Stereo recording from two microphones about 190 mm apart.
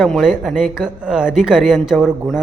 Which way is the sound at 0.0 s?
Centre (ahead or behind).